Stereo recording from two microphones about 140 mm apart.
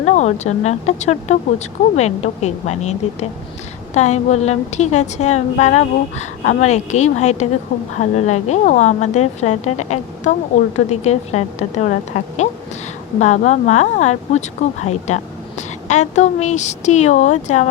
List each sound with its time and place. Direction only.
0.0 s speech: 55° left (ahead or behind)
3.9 s speech: 55° left (ahead or behind)